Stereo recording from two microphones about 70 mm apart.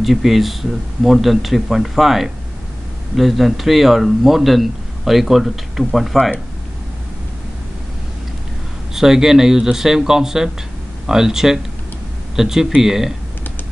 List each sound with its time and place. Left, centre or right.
0.0 s a man's voice: centre
8.9 s a man's voice: centre